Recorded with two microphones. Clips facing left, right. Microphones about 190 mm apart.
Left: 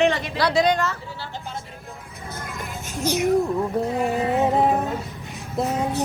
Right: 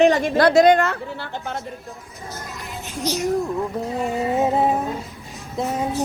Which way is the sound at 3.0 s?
55° left (ahead or behind).